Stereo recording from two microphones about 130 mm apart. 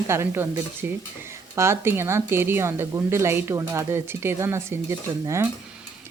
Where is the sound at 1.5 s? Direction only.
20° right (ahead or behind).